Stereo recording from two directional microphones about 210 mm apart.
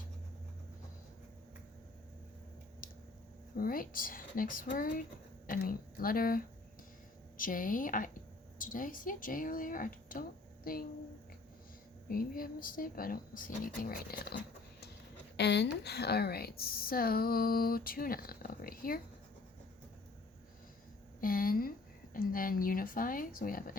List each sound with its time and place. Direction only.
3.6 s a woman's voice: 45° left (ahead or behind)
12.0 s a woman's voice: 45° left (ahead or behind)
15.4 s a woman's voice: 55° left (ahead or behind)
21.2 s a woman's voice: 45° left (ahead or behind)